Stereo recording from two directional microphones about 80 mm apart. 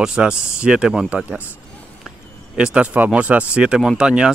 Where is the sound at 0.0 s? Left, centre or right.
Centre.